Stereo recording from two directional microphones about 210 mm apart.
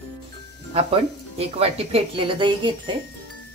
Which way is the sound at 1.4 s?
30° right (ahead or behind).